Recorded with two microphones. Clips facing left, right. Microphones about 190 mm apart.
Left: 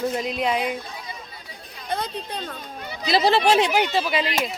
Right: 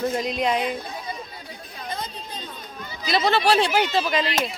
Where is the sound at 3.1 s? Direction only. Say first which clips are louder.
Left 2 dB; 30° left (ahead or behind); by 4.4 s 10° left (ahead or behind).